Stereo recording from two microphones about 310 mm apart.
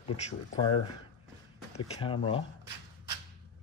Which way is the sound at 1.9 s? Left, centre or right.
Centre.